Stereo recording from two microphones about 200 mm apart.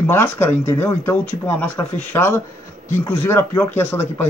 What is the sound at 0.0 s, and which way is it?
A man's voice, 10° left (ahead or behind).